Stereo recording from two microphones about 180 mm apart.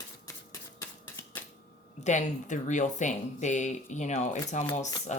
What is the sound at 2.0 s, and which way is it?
Speech, 45° left (ahead or behind).